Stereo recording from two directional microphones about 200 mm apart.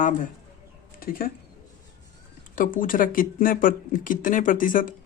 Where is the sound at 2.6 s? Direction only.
40° left (ahead or behind).